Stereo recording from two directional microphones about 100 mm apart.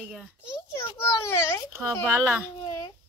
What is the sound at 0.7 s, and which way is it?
Speech, 25° left (ahead or behind).